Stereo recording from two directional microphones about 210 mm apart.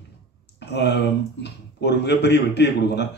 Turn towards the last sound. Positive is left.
turn(degrees=55)  # may be behind; listen again after turning